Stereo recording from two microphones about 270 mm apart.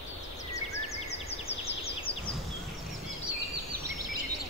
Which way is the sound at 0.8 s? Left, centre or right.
Left.